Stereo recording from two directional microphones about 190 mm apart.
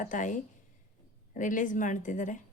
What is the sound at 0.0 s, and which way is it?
Speech, 40° left (ahead or behind).